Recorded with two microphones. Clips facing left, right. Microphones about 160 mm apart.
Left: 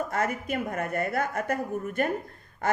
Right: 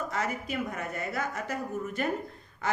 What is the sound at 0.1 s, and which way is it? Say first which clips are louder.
A woman's voice: left 4 dB; 50° left (ahead or behind).